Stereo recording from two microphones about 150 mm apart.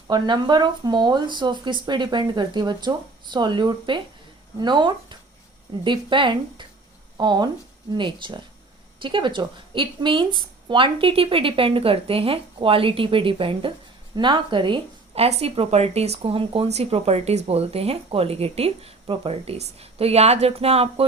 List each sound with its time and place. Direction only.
0.1 s speech: 30° right (ahead or behind)